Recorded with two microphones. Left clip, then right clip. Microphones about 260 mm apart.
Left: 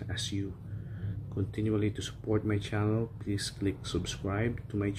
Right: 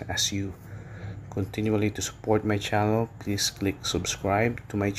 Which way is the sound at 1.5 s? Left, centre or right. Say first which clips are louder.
Right 5 dB; centre.